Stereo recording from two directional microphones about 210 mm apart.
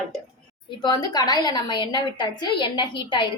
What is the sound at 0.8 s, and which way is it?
A woman's voice, 20° left (ahead or behind).